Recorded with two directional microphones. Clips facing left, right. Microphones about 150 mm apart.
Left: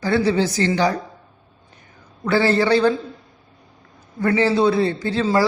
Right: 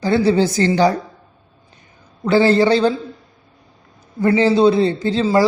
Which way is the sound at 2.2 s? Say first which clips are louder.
Right 4 dB; 20° right (ahead or behind).